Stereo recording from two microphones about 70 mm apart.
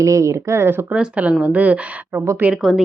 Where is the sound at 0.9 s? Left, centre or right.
Centre.